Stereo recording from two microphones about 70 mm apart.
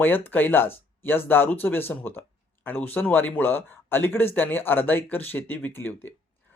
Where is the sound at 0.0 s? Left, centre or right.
Left.